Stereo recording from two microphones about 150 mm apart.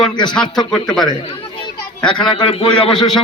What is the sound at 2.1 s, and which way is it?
Speech, 30° left (ahead or behind).